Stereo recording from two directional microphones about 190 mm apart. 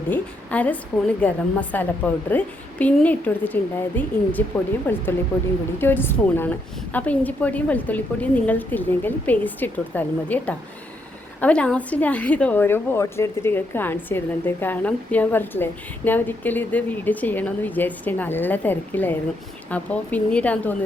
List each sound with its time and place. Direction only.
0.1 s a woman's voice: 10° left (ahead or behind)